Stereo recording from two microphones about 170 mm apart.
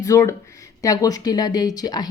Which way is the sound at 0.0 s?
20° left (ahead or behind).